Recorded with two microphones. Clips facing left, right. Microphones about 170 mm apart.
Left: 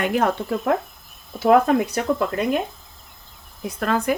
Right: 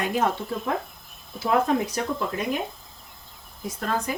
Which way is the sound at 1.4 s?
60° left (ahead or behind).